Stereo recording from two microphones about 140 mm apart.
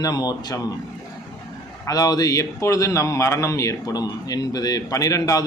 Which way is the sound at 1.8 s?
25° left (ahead or behind).